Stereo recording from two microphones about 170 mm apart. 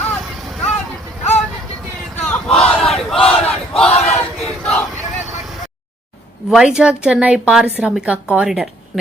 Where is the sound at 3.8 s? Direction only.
40° left (ahead or behind).